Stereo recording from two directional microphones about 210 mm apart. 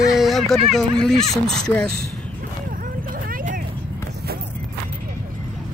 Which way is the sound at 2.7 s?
40° right (ahead or behind).